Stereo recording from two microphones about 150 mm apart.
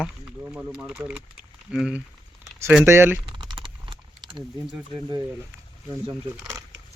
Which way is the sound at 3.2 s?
35° right (ahead or behind).